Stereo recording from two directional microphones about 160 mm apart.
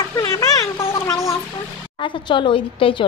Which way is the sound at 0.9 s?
20° left (ahead or behind).